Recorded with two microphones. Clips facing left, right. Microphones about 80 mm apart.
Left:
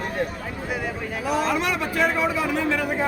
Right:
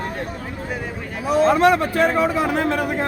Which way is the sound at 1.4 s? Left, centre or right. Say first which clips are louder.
Right 12 dB; right.